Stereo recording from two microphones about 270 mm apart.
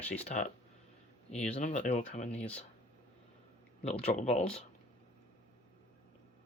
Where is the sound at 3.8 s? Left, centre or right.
Left.